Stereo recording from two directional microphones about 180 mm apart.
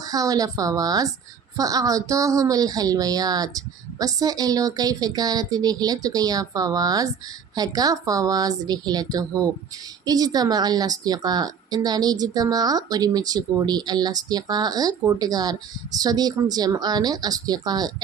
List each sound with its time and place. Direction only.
0.0 s a woman's voice: 20° right (ahead or behind)